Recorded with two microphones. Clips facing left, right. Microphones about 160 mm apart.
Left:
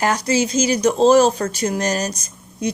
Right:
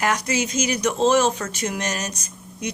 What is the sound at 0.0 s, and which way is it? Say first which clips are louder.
Speech: left 4 dB; 30° left (ahead or behind).